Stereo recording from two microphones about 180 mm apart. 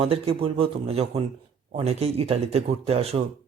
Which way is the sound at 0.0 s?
35° right (ahead or behind).